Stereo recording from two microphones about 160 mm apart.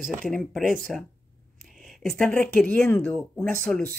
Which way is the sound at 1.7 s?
Centre (ahead or behind).